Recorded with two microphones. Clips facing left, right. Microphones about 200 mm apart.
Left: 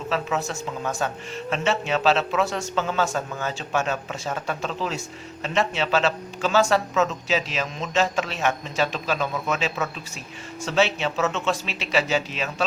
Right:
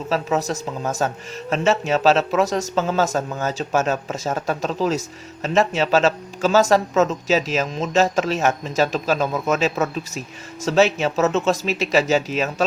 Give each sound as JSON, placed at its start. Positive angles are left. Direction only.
{"t": 0.1, "sound": "speech", "side_deg": -40}